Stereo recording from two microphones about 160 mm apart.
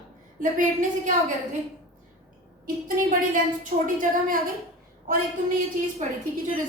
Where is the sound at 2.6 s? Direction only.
60° right (ahead or behind).